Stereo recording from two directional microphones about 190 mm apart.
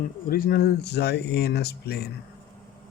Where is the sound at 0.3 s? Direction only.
50° left (ahead or behind).